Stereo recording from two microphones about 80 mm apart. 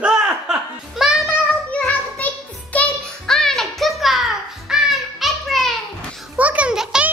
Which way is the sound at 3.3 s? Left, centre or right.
Centre.